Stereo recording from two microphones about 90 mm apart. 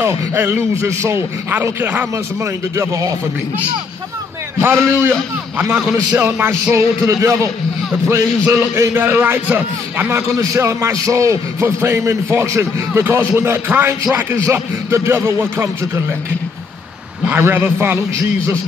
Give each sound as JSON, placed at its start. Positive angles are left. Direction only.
{"t": 0.0, "sound": "a man's voice", "side_deg": -30}
{"t": 2.4, "sound": "speech", "side_deg": -35}
{"t": 4.6, "sound": "a man's voice", "side_deg": -25}
{"t": 6.7, "sound": "a man's voice", "side_deg": -30}
{"t": 10.5, "sound": "a man's voice", "side_deg": -30}
{"t": 17.4, "sound": "a man's voice", "side_deg": -25}